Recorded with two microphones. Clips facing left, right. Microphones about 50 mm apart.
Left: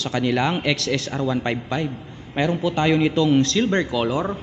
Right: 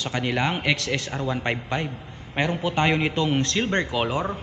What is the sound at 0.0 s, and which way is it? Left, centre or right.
Speech, centre.